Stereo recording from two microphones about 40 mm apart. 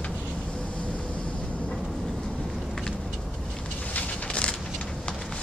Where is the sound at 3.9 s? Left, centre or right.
Left.